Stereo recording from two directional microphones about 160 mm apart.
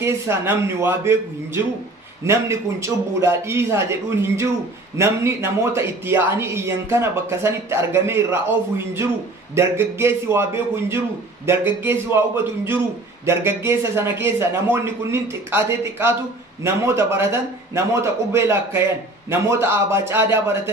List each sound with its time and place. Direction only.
0.0 s a man's voice: 15° right (ahead or behind)